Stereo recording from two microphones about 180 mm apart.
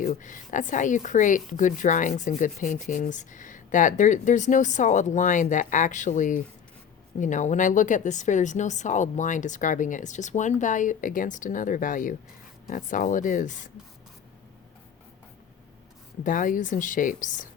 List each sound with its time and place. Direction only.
0.0 s speech: 45° left (ahead or behind)
16.2 s speech: 50° left (ahead or behind)